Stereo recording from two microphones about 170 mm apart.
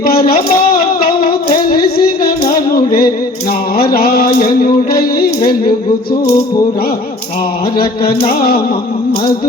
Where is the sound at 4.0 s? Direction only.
60° left (ahead or behind).